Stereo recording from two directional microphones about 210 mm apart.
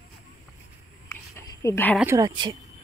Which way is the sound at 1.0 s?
15° left (ahead or behind).